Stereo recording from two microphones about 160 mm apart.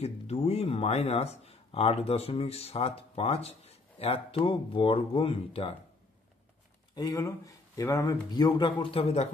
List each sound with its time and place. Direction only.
0.0 s speech: 40° left (ahead or behind)
7.0 s speech: 20° left (ahead or behind)
9.0 s speech: 45° left (ahead or behind)